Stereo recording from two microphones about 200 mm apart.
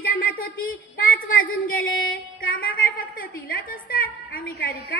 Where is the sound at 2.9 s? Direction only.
45° left (ahead or behind).